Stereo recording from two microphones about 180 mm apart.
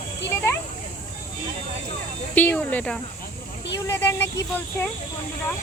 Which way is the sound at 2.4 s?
10° left (ahead or behind).